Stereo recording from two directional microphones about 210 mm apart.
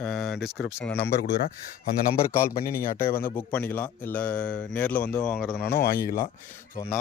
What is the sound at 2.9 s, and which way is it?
Speech, 10° left (ahead or behind).